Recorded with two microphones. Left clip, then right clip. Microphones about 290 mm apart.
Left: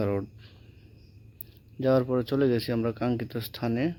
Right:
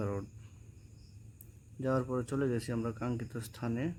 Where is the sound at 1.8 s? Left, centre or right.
Centre.